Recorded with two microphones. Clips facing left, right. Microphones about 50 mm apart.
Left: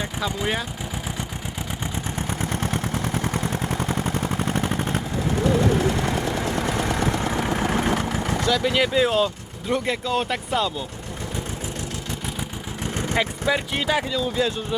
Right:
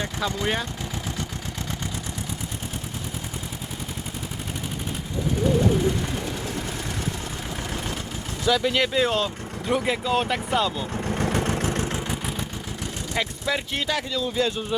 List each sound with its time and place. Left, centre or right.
0.3 s speech: centre
3.2 s a sound: left
6.0 s vehicle: left
8.4 s speech: centre
11.2 s vehicle: right
13.5 s speech: centre